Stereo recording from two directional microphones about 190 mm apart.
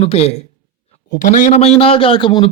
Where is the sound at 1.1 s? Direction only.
45° left (ahead or behind); by 2.5 s 25° left (ahead or behind).